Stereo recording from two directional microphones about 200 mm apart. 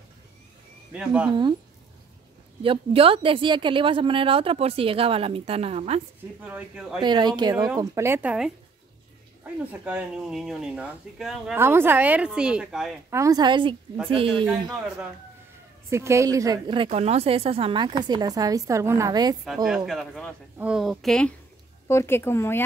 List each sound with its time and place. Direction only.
0.9 s speech: 5° right (ahead or behind)
2.6 s a woman's voice: 25° right (ahead or behind)
6.4 s speech: 5° right (ahead or behind)
7.0 s speech: 20° right (ahead or behind)
9.7 s speech: 5° right (ahead or behind)
13.1 s a woman's voice: 15° right (ahead or behind)
15.9 s a woman's voice: 15° right (ahead or behind)
19.4 s speech: centre (ahead or behind)
21.8 s speech: 10° left (ahead or behind)